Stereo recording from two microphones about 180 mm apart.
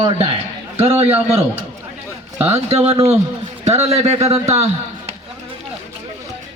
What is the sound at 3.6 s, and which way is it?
Speech, 35° right (ahead or behind).